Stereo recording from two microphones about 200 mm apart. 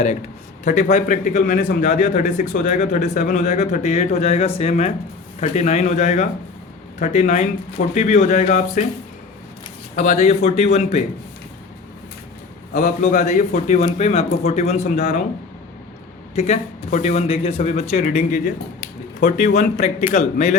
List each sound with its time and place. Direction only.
0.6 s a man's voice: 40° left (ahead or behind)
9.9 s a man's voice: 35° left (ahead or behind)
12.7 s a man's voice: 35° left (ahead or behind)
16.3 s a man's voice: 35° left (ahead or behind)
19.5 s a man's voice: 35° left (ahead or behind)